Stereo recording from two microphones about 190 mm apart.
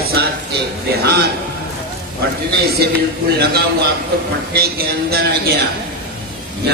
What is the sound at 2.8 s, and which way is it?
Speech, 55° right (ahead or behind).